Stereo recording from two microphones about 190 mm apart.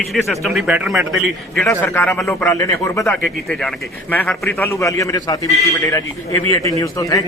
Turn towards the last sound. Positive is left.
turn(degrees=20)  # may be behind; listen again after turning